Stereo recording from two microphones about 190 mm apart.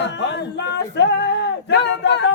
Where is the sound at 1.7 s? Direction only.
65° left (ahead or behind).